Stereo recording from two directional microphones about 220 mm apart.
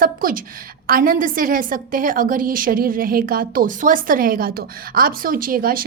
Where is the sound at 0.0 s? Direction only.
40° right (ahead or behind).